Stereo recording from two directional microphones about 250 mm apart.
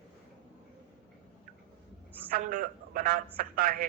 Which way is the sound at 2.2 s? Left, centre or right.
Right.